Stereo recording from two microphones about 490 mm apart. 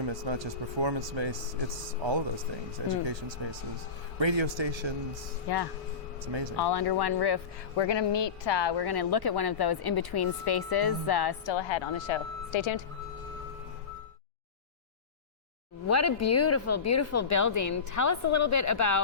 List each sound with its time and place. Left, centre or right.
0.0 s speech: right
3.1 s speech: right
4.2 s speech: right
5.5 s speech: left
6.2 s speech: right
6.6 s speech: left
15.9 s speech: left